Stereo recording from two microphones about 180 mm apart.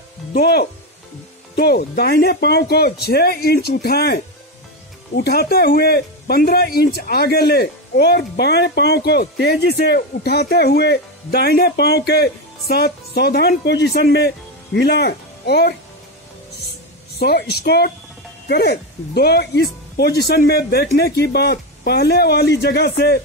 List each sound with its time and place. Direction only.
0.3 s speech: 60° left (ahead or behind)
17.2 s speech: 60° left (ahead or behind)